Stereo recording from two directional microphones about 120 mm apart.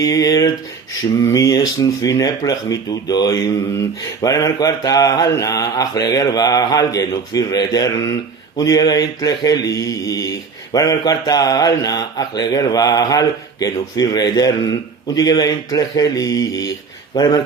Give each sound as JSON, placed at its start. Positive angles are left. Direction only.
{"t": 0.0, "sound": "speech", "side_deg": 30}